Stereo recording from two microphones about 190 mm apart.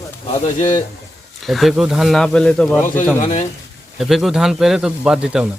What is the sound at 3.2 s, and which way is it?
Speech, 40° left (ahead or behind).